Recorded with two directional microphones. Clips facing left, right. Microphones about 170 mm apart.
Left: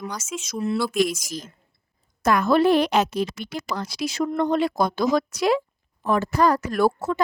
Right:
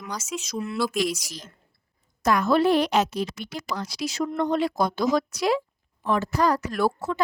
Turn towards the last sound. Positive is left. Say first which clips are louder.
# left 4 dB
turn(degrees=45)  # may be behind; listen again after turning